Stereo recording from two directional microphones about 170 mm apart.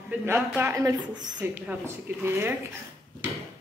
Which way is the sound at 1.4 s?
10° right (ahead or behind).